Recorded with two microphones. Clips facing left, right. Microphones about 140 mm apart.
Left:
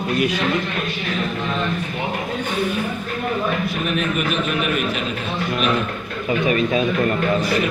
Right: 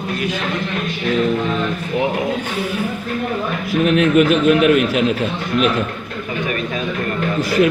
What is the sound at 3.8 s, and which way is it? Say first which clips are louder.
A man's voice: right 13 dB; 90° right.